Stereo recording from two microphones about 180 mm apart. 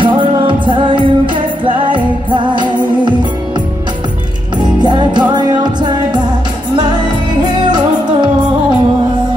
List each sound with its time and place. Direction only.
0.0 s music: 25° right (ahead or behind)
4.8 s music: 25° right (ahead or behind)